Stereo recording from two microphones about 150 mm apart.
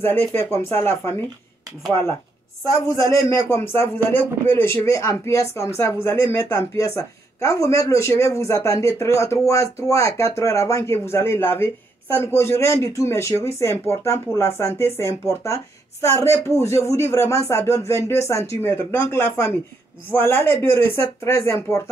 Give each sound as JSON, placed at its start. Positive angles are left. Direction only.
{"t": 0.0, "sound": "speech", "side_deg": 15}
{"t": 3.2, "sound": "speech", "side_deg": 15}